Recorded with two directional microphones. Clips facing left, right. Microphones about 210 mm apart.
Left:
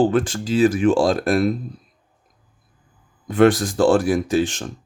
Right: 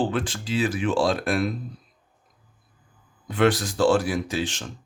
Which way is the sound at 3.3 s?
50° left (ahead or behind).